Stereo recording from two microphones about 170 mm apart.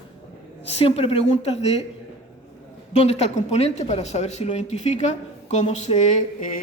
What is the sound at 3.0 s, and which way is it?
A woman's voice, 40° left (ahead or behind).